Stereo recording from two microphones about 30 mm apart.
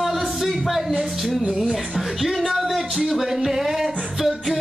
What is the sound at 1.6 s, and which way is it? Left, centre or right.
Speech, centre.